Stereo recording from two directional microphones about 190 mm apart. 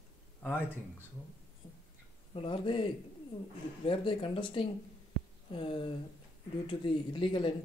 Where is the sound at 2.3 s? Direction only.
25° left (ahead or behind).